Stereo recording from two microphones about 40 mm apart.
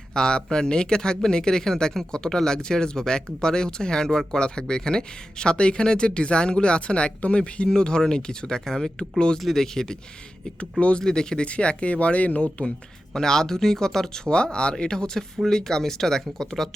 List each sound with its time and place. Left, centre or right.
0.1 s speech: centre
9.4 s speech: centre
10.6 s speech: left
11.0 s speech: centre
11.4 s speech: left
13.1 s speech: centre